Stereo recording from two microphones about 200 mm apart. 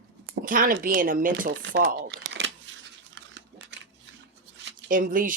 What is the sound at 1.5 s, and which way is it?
Crumpling, 65° right (ahead or behind).